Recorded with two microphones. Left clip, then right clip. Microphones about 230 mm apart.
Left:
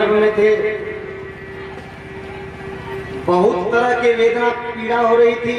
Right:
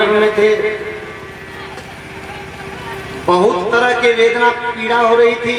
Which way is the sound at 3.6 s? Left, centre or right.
Centre.